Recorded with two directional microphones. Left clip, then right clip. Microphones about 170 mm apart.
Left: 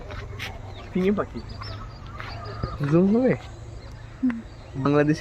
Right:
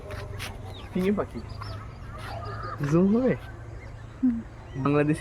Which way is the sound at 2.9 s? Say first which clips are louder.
Left 3 dB; 30° left (ahead or behind).